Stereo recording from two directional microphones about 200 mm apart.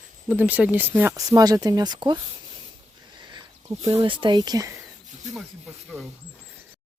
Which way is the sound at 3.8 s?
25° right (ahead or behind).